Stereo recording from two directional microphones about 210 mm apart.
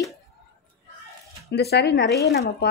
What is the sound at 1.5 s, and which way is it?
Speech, 50° left (ahead or behind).